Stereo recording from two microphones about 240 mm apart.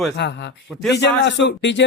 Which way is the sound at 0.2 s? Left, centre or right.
Left.